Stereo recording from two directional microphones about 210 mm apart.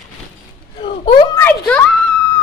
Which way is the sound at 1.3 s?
10° left (ahead or behind).